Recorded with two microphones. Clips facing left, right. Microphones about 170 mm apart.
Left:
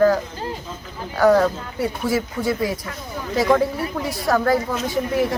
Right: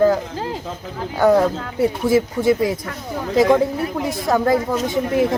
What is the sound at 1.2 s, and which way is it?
Speech, 25° right (ahead or behind).